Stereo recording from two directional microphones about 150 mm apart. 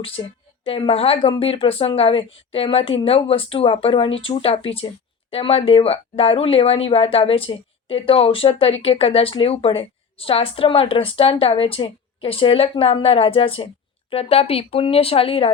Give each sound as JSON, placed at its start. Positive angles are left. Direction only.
{"t": 0.0, "sound": "speech", "side_deg": 40}